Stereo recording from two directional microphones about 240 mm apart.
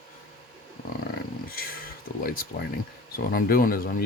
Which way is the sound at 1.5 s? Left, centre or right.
Left.